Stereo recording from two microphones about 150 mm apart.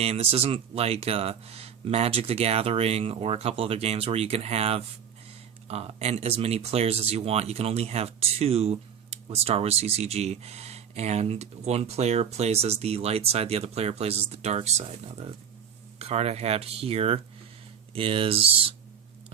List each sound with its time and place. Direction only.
0.0 s speech: 45° right (ahead or behind)